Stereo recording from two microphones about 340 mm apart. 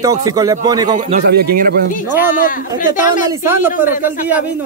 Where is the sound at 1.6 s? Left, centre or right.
Right.